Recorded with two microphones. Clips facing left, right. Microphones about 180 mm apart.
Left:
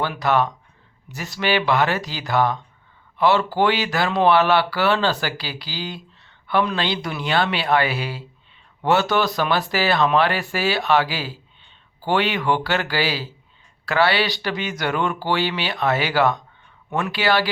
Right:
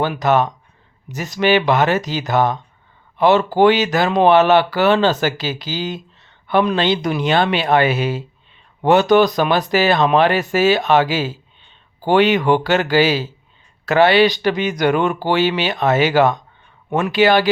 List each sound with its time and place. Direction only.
0.0 s speech: 20° right (ahead or behind)